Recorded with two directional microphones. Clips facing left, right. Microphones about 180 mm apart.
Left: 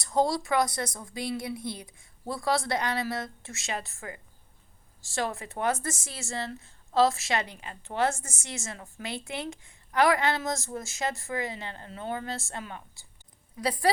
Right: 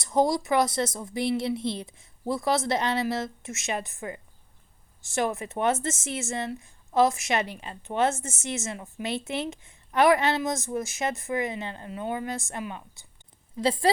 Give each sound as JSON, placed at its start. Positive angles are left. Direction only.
{"t": 0.0, "sound": "a woman's voice", "side_deg": -20}